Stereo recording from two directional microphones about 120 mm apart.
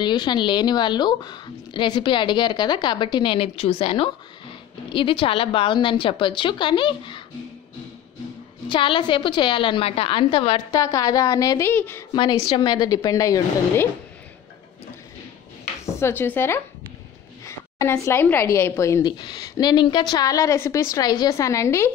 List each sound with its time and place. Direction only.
0.0 s a woman's voice: 35° left (ahead or behind)
8.6 s a woman's voice: 45° left (ahead or behind)
10.7 s a woman's voice: 30° left (ahead or behind)
11.7 s a woman's voice: 15° left (ahead or behind)
12.1 s a woman's voice: 35° left (ahead or behind)
15.8 s a woman's voice: 25° left (ahead or behind)
19.0 s a woman's voice: 40° left (ahead or behind)